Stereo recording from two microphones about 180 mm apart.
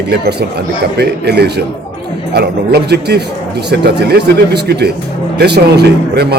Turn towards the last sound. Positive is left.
turn(degrees=-65)  # may be behind; listen again after turning